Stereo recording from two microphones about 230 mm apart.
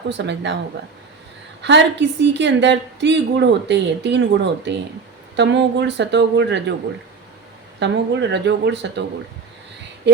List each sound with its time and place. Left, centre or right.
0.2 s a woman's voice: right
1.6 s a woman's voice: right
7.8 s a woman's voice: right